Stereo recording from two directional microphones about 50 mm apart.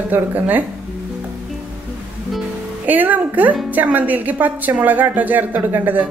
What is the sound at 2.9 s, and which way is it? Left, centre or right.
A woman's voice, right.